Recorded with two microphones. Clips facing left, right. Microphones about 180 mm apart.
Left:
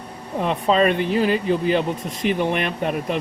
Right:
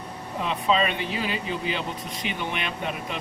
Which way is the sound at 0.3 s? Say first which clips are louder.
Left 5 dB; 50° left (ahead or behind).